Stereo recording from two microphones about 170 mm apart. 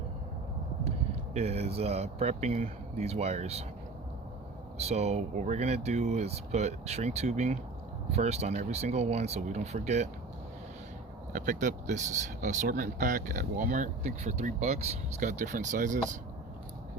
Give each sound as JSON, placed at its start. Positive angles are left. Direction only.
{"t": 0.9, "sound": "speech", "side_deg": -40}
{"t": 4.8, "sound": "speech", "side_deg": -40}
{"t": 11.3, "sound": "speech", "side_deg": -50}